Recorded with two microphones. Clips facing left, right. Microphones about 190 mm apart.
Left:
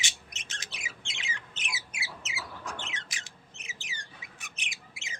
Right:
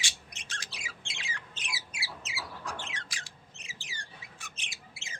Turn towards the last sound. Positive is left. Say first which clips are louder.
# left 2 dB
turn(degrees=15)  # may be behind; listen again after turning